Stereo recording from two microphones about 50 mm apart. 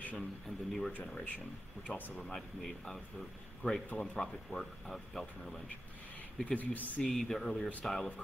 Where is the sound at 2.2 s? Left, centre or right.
Centre.